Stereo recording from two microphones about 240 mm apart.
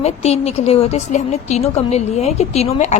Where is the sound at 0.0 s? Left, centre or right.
Left.